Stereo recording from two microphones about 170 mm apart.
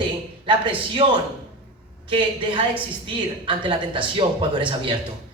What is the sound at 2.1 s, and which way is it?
A woman's voice, 30° right (ahead or behind).